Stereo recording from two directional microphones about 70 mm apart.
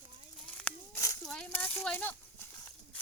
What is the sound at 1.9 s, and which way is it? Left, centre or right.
Horse, left.